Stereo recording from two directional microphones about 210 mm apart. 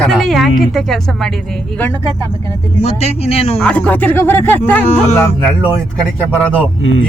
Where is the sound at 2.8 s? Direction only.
30° left (ahead or behind).